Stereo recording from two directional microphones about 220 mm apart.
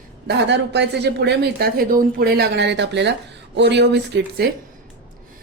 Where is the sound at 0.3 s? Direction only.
50° right (ahead or behind).